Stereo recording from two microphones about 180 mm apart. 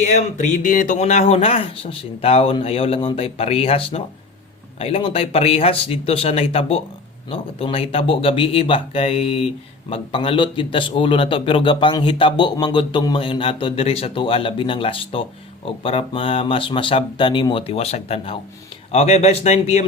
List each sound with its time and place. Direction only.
0.0 s a man's voice: 40° left (ahead or behind)